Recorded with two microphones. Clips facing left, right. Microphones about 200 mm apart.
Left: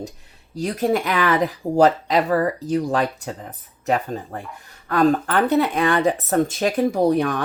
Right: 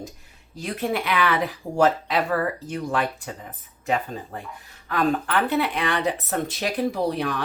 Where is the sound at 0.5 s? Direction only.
40° left (ahead or behind).